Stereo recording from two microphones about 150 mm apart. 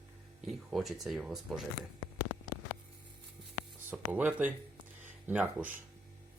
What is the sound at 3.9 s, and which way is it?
Speech, 10° right (ahead or behind).